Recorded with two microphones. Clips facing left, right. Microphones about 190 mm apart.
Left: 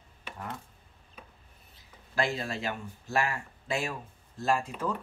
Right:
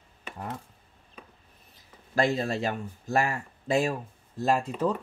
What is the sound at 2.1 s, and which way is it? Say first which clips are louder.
Speech: right 5 dB; 40° right (ahead or behind).